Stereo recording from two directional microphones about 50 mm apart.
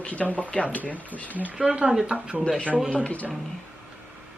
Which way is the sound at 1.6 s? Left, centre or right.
Centre.